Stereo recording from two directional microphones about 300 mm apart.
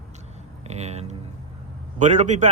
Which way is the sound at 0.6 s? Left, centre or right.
Right.